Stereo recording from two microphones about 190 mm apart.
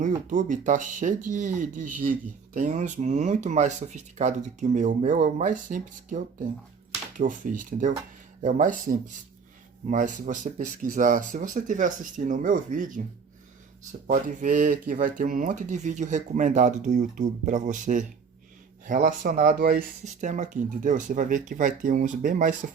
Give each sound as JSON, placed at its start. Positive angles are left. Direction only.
{"t": 0.0, "sound": "speech", "side_deg": -40}
{"t": 14.1, "sound": "speech", "side_deg": -45}
{"t": 18.9, "sound": "speech", "side_deg": -50}